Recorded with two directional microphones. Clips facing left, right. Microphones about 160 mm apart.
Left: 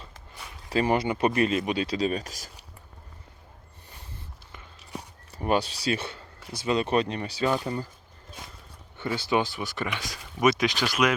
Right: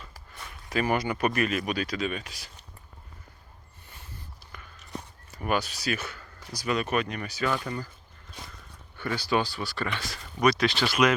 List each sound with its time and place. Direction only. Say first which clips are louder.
0.7 s speech: left 3 dB; 30° left (ahead or behind)
5.3 s speech: left 3 dB; 30° left (ahead or behind)
9.0 s speech: left 1 dB; 20° left (ahead or behind)